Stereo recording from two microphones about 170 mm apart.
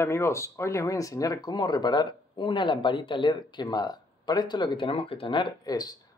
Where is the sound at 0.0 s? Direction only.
15° left (ahead or behind).